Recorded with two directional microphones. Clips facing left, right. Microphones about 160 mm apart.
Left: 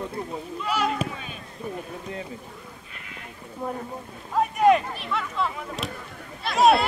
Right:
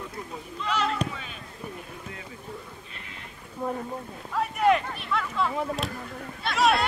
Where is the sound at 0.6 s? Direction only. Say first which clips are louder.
Left 1 dB; 10° left (ahead or behind).